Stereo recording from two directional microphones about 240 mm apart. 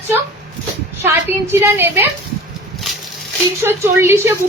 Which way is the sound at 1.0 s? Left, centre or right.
Centre.